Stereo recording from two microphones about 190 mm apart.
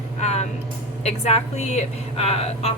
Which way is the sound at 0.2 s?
35° left (ahead or behind).